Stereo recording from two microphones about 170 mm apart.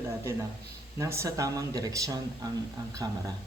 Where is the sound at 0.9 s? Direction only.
15° right (ahead or behind).